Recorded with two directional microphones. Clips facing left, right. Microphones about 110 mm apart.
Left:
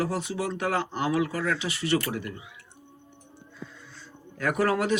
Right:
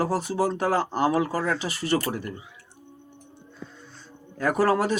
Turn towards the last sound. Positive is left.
turn(degrees=-40)  # may be behind; listen again after turning